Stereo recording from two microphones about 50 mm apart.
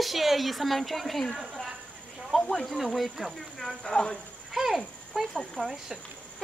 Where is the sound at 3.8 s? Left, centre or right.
Centre.